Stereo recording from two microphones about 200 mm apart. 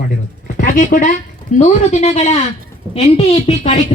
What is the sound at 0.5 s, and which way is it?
Speech, 45° left (ahead or behind).